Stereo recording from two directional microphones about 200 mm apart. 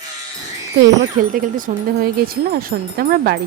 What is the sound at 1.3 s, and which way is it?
Speech, 40° right (ahead or behind).